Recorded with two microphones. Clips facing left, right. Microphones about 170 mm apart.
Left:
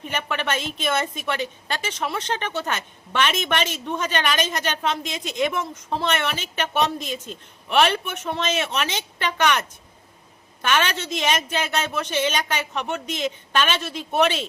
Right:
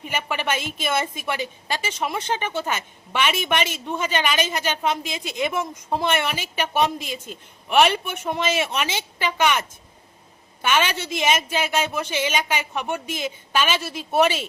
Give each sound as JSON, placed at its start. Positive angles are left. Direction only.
{"t": 0.0, "sound": "a woman's voice", "side_deg": -10}